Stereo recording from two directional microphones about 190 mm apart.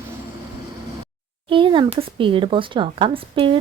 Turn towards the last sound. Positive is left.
turn(degrees=-25)  # may be behind; listen again after turning